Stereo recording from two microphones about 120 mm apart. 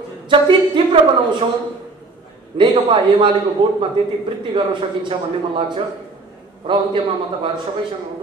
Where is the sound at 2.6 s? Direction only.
40° right (ahead or behind).